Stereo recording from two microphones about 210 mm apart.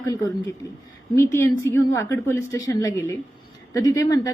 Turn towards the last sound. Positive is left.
turn(degrees=15)  # may be behind; listen again after turning